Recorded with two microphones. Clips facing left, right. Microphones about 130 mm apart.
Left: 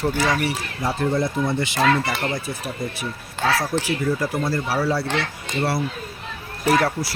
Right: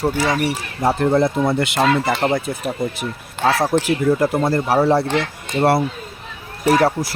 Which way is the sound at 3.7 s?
55° right (ahead or behind).